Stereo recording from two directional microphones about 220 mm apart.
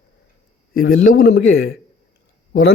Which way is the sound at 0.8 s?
45° left (ahead or behind).